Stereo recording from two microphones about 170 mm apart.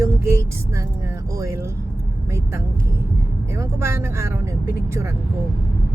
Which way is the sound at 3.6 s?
15° right (ahead or behind).